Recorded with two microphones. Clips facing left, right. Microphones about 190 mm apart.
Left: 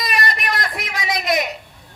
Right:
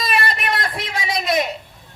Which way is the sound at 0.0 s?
30° right (ahead or behind).